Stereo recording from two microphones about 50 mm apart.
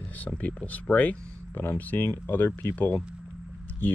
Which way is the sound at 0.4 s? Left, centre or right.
Left.